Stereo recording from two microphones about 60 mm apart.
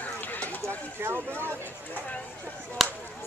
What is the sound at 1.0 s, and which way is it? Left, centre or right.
Speech, right.